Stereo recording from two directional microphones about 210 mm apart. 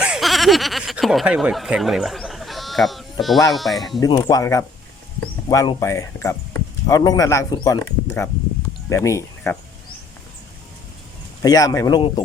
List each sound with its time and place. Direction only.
0.0 s speech: centre (ahead or behind)
4.0 s speech: 15° left (ahead or behind)
11.4 s speech: 15° left (ahead or behind)